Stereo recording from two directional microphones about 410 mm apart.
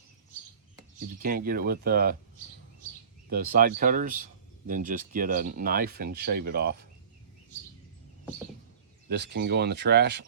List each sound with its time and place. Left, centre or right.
0.9 s speech: right
3.2 s speech: right
9.0 s speech: right